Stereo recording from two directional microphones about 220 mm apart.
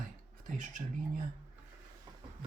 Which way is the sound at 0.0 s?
35° right (ahead or behind).